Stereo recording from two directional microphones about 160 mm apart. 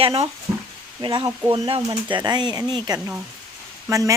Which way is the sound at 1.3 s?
15° right (ahead or behind).